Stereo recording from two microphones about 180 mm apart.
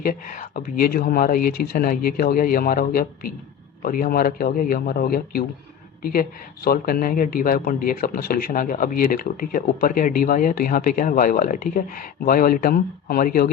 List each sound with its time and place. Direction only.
0.0 s a woman's voice: 50° left (ahead or behind)